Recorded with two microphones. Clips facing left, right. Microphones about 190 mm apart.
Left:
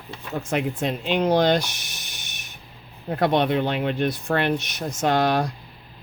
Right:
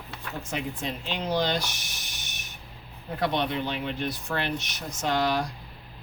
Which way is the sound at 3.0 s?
60° left (ahead or behind).